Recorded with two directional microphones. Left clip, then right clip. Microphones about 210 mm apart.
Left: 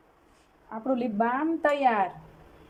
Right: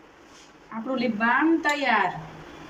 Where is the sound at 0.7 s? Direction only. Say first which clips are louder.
Right 1 dB; 25° left (ahead or behind).